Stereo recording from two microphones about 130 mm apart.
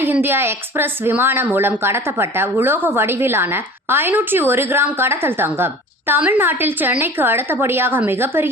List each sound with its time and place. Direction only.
0.0 s a woman's voice: 15° right (ahead or behind)